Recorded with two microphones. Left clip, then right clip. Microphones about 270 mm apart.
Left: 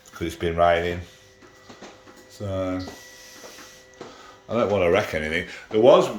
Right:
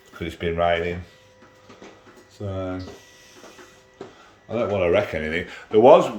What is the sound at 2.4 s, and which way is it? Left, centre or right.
Speech, centre.